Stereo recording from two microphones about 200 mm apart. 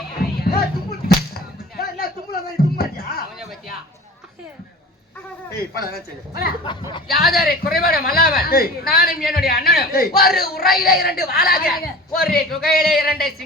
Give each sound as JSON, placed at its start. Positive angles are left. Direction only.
{"t": 0.4, "sound": "whip", "side_deg": 50}
{"t": 5.7, "sound": "a man's voice", "side_deg": 50}
{"t": 7.2, "sound": "a man's voice", "side_deg": 0}
{"t": 7.4, "sound": "a man's voice", "side_deg": 50}